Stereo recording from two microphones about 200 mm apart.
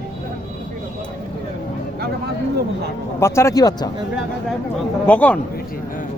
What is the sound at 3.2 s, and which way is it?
Speech, 15° left (ahead or behind).